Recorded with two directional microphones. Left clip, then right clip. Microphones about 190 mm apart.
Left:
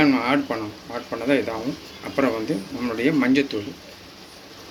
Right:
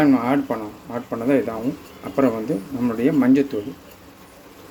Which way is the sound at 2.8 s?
30° right (ahead or behind).